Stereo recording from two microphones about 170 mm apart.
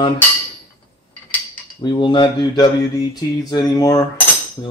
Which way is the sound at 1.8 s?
25° left (ahead or behind).